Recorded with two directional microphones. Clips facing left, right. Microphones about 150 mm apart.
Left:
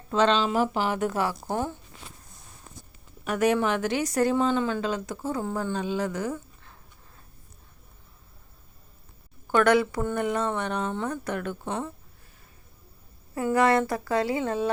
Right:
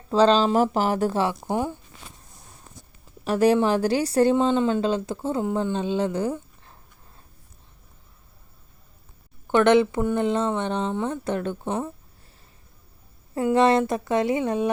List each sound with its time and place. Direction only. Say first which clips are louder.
0.1 s speech: right 5 dB; 35° right (ahead or behind); by 1.7 s 15° right (ahead or behind)
3.2 s a woman's voice: right 4 dB; 30° right (ahead or behind)
5.5 s speech: right 5 dB; 15° right (ahead or behind)
5.7 s a woman's voice: right 4 dB; 25° right (ahead or behind)
9.5 s a woman's voice: right 4 dB; 25° right (ahead or behind)
13.3 s a woman's voice: right 3 dB; 25° right (ahead or behind)